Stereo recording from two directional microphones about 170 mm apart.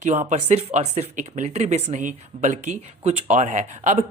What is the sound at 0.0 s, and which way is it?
Speech, 45° right (ahead or behind).